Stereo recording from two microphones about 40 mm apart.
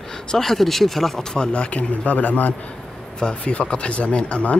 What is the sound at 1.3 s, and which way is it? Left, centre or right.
Speech, left.